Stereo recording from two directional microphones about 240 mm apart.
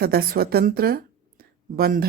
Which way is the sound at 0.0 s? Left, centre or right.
Right.